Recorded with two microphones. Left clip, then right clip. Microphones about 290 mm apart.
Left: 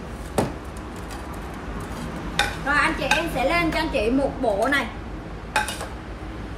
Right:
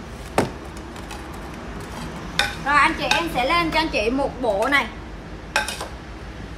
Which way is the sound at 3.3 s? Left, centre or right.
Right.